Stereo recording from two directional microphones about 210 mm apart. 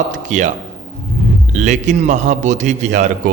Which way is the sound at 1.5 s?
35° right (ahead or behind).